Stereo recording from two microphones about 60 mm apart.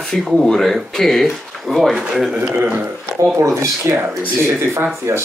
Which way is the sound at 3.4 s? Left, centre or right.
Right.